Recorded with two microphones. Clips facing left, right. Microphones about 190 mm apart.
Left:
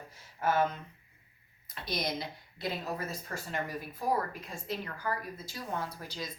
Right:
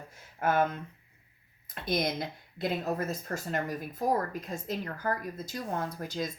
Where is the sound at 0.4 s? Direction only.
55° right (ahead or behind).